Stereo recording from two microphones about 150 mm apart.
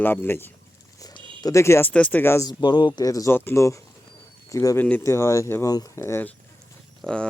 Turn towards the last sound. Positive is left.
turn(degrees=-15)  # may be behind; listen again after turning